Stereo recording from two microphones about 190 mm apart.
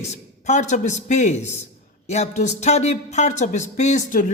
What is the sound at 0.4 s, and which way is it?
Speech, 35° left (ahead or behind).